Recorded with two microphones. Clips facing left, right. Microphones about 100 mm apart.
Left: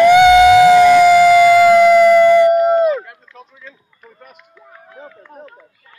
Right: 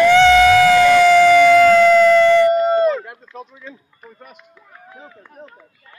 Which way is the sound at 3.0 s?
20° right (ahead or behind).